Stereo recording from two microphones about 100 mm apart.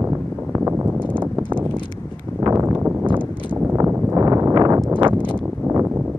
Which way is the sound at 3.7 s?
35° right (ahead or behind).